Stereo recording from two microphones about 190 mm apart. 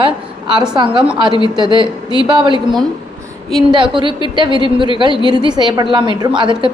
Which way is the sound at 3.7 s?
25° right (ahead or behind).